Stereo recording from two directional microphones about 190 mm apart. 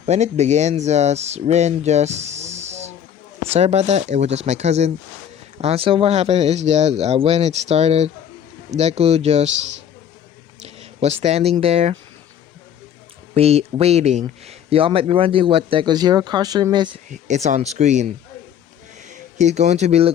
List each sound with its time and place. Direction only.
0.0 s speech: 35° right (ahead or behind)
10.8 s speech: 35° right (ahead or behind)
13.3 s speech: 35° right (ahead or behind)
17.1 s speech: 40° right (ahead or behind)